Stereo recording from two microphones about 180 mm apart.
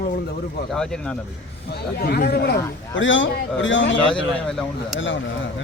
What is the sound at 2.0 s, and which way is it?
Speech, 60° left (ahead or behind).